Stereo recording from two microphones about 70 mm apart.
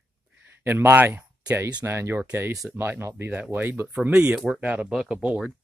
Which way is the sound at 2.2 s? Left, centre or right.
Right.